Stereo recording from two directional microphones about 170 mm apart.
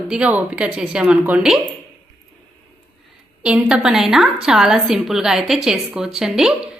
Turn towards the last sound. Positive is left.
turn(degrees=-5)  # may be behind; listen again after turning